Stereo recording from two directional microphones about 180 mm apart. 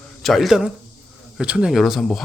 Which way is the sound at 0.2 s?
Centre (ahead or behind).